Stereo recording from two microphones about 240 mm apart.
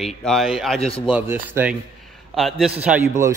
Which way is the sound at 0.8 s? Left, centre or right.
Left.